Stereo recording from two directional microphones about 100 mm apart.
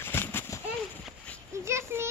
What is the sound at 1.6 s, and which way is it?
Speech, 30° right (ahead or behind).